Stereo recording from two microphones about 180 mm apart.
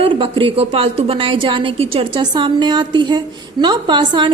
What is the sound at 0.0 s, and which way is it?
A woman's voice, 30° right (ahead or behind).